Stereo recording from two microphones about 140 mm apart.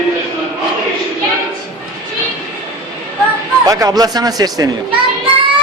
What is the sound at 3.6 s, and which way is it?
A man's voice, 25° right (ahead or behind).